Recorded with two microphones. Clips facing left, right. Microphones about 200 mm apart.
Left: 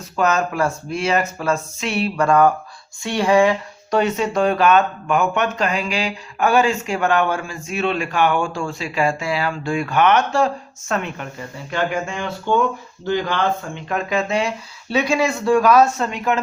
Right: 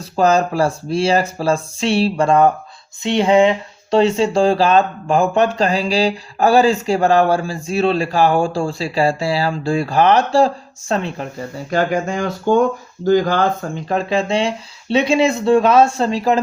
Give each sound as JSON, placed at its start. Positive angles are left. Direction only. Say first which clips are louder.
{"t": 0.0, "sound": "speech", "louder": "right 5 dB", "side_deg": -30}